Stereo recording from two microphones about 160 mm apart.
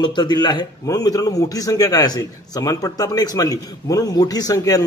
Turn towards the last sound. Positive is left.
turn(degrees=20)  # may be behind; listen again after turning